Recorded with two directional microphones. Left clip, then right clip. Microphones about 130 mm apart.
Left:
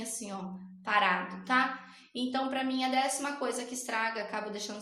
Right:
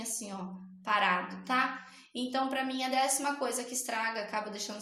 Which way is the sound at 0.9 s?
45° right (ahead or behind).